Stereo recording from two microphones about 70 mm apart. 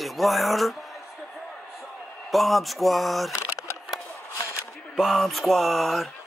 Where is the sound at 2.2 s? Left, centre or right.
Centre.